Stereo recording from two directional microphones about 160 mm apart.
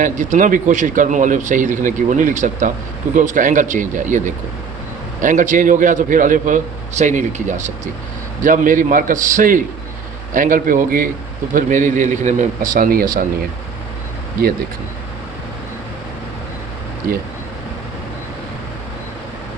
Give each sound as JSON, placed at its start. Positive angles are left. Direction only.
{"t": 0.0, "sound": "speech", "side_deg": -50}
{"t": 5.2, "sound": "a man's voice", "side_deg": -50}
{"t": 17.1, "sound": "a man's voice", "side_deg": -65}